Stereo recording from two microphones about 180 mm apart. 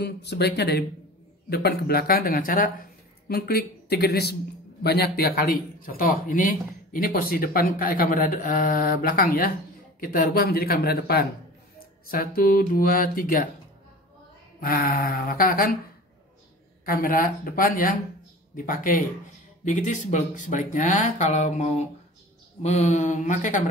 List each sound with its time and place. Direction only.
0.0 s a man's voice: 65° left (ahead or behind); by 13.5 s 50° left (ahead or behind)
14.6 s a man's voice: 55° left (ahead or behind)
16.8 s a man's voice: 55° left (ahead or behind)